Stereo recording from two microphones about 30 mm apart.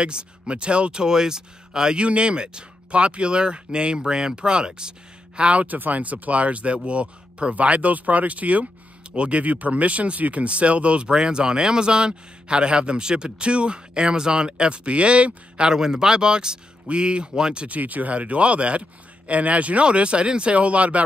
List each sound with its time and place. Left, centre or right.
0.0 s speech: right
1.0 s speech: centre
2.0 s speech: right
5.7 s a man's voice: right
7.5 s a man's voice: right
9.1 s speech: right
15.6 s speech: right
17.6 s a man's voice: right
20.5 s a man's voice: right